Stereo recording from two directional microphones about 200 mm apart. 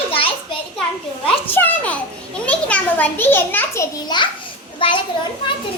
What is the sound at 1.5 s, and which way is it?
A child's voice, 10° left (ahead or behind).